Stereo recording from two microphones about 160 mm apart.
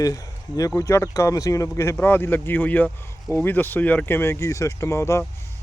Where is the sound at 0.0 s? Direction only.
20° left (ahead or behind).